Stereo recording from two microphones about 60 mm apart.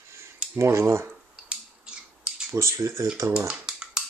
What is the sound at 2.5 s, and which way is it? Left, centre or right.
Speech, right.